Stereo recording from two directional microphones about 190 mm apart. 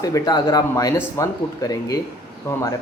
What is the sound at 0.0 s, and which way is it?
Speech, 20° left (ahead or behind).